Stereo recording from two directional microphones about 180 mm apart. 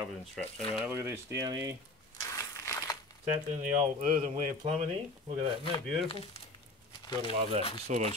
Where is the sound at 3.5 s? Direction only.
45° right (ahead or behind).